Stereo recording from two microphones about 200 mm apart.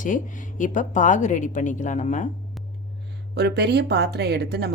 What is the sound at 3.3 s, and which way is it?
A woman's voice, 55° right (ahead or behind).